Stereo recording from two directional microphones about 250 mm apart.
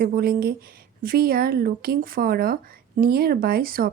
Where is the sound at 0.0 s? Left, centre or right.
Right.